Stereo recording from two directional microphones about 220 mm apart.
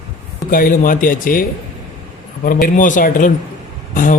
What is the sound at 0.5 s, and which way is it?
Speech, 40° left (ahead or behind).